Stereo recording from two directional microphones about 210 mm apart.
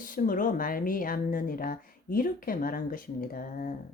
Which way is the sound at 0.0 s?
40° left (ahead or behind).